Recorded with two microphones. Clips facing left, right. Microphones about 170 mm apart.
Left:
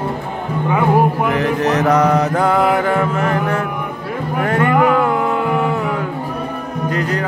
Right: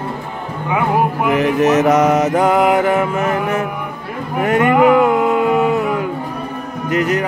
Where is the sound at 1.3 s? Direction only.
15° right (ahead or behind).